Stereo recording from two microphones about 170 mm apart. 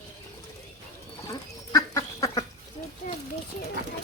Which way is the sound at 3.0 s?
50° left (ahead or behind).